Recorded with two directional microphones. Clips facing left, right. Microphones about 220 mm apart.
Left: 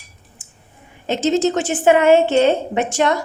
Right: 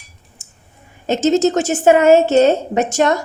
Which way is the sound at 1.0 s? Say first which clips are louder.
Right 3 dB; 45° right (ahead or behind).